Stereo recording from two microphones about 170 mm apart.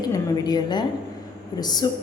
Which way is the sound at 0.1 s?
25° left (ahead or behind).